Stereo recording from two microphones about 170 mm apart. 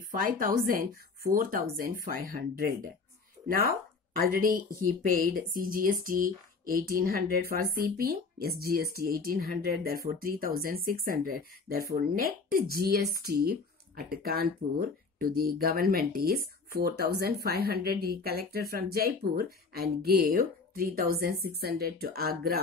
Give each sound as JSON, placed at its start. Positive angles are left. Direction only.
{"t": 0.1, "sound": "speech", "side_deg": -55}